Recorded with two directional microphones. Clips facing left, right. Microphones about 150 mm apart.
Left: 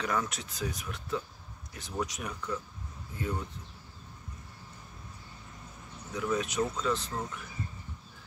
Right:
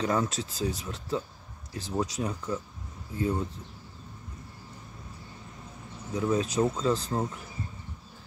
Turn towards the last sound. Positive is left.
turn(degrees=-30)  # may be behind; listen again after turning